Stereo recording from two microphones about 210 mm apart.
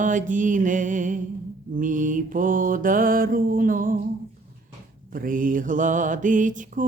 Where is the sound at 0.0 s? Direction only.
35° right (ahead or behind).